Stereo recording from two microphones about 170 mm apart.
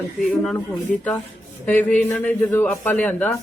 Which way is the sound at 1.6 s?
10° left (ahead or behind).